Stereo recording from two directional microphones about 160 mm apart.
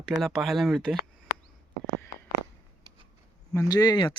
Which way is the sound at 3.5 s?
25° left (ahead or behind).